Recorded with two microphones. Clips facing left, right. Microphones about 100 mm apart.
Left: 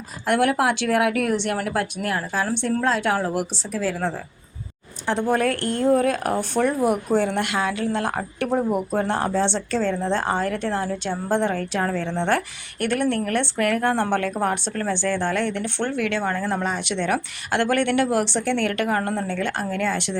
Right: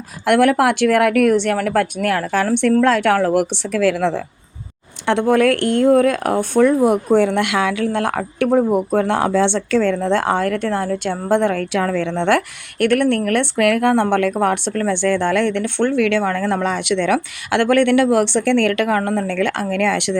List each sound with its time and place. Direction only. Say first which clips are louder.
0.3 s speech: right 6 dB; 60° right (ahead or behind); by 4.2 s 80° right
5.0 s speech: right 7 dB; 65° right (ahead or behind)